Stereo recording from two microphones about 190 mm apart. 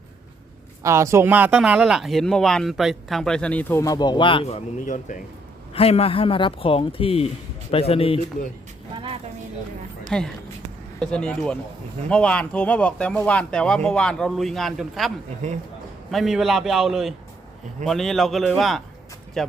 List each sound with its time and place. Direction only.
0.8 s speech: 15° right (ahead or behind); by 4.5 s 25° left (ahead or behind)
5.7 s a man's voice: 30° left (ahead or behind)
10.1 s speech: 5° left (ahead or behind)
15.4 s speech: 40° right (ahead or behind)
16.1 s speech: centre (ahead or behind)